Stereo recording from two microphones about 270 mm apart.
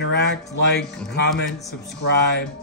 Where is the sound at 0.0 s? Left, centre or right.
Left.